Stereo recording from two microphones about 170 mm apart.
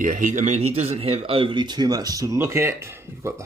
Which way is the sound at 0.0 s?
50° right (ahead or behind).